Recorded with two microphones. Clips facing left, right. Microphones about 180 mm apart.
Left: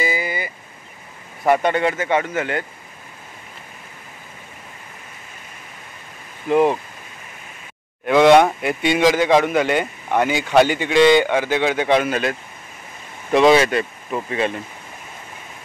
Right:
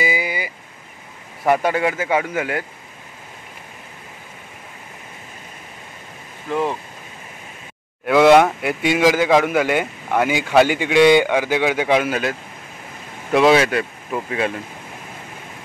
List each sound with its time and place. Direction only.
0.0 s a sound: 10° right (ahead or behind)
1.4 s speech: centre (ahead or behind)
6.5 s speech: 20° left (ahead or behind)
8.1 s a man's voice: 5° right (ahead or behind)